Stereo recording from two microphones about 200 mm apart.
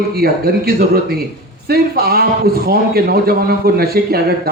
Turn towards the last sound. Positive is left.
turn(degrees=-50)  # may be behind; listen again after turning